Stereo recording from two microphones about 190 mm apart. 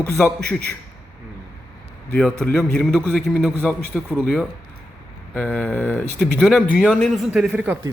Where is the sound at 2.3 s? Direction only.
5° left (ahead or behind).